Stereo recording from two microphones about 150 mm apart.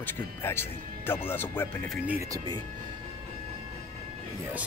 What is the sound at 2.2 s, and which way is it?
Speech, 25° right (ahead or behind).